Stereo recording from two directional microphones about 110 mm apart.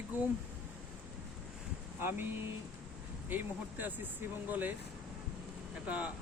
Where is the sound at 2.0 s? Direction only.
20° right (ahead or behind).